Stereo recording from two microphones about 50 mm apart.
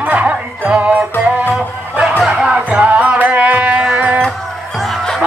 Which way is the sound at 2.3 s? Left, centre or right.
Centre.